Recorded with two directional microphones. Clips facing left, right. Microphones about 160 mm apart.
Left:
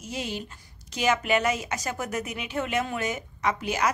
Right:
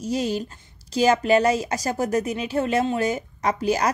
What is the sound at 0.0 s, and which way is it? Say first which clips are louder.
Speech: right 9 dB; 40° right (ahead or behind).